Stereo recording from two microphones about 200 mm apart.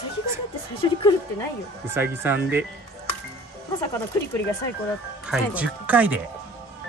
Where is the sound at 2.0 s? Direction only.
10° right (ahead or behind).